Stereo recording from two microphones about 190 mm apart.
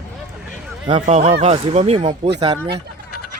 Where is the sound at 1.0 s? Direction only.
35° right (ahead or behind).